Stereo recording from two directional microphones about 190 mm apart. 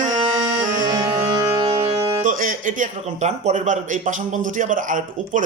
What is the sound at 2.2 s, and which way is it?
Speech, 45° right (ahead or behind).